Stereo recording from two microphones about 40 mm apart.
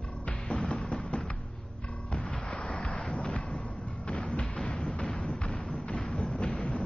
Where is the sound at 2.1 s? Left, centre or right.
Centre.